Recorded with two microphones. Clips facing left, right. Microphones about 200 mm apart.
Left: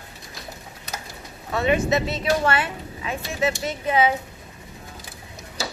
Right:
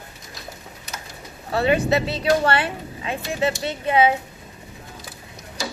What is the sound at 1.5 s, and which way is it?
Speech, 30° right (ahead or behind).